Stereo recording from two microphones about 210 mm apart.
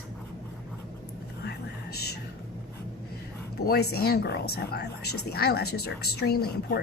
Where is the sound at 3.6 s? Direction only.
45° left (ahead or behind).